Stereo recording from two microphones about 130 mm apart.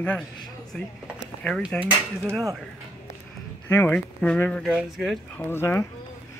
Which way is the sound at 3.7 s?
15° left (ahead or behind).